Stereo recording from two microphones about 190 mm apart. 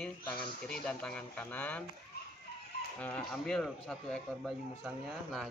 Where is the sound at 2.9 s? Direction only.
5° left (ahead or behind).